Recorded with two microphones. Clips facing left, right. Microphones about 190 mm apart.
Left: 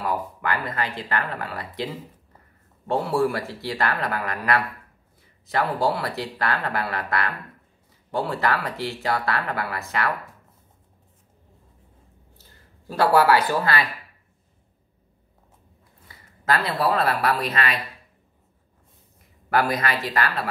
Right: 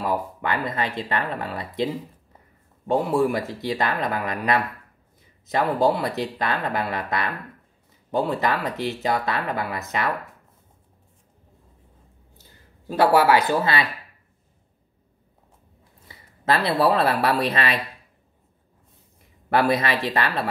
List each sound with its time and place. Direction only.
0.0 s speech: 25° right (ahead or behind)
12.4 s speech: 15° right (ahead or behind)
16.8 s speech: 30° right (ahead or behind)
19.5 s speech: 25° right (ahead or behind)